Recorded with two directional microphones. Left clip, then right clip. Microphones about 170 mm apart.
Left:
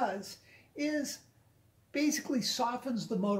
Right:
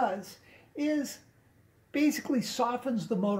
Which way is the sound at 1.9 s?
45° right (ahead or behind).